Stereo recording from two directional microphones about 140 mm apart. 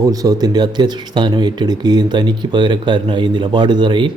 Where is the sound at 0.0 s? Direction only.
25° right (ahead or behind).